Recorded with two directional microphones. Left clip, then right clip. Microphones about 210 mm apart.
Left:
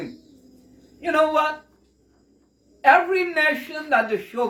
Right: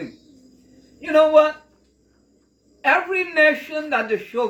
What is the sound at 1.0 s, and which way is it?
Speech, 15° left (ahead or behind).